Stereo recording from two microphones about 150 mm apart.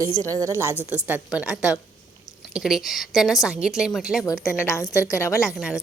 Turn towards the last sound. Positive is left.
turn(degrees=-5)  # may be behind; listen again after turning